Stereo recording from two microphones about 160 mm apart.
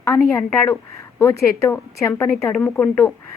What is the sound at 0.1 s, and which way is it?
A woman's voice, 15° left (ahead or behind).